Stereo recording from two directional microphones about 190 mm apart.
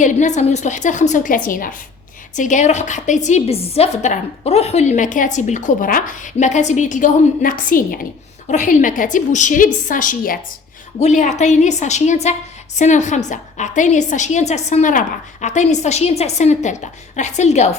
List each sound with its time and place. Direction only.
0.0 s a woman's voice: 40° left (ahead or behind)